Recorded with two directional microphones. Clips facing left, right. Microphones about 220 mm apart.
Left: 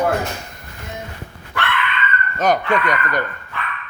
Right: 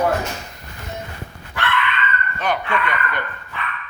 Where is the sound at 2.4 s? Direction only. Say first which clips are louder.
Left 5 dB; 40° left (ahead or behind).